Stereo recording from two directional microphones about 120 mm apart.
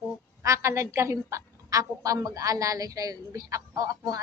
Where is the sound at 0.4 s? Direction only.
25° right (ahead or behind).